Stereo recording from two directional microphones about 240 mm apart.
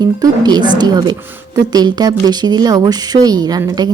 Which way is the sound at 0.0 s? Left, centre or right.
Centre.